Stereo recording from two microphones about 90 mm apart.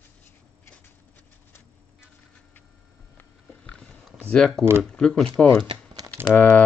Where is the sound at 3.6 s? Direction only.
10° left (ahead or behind).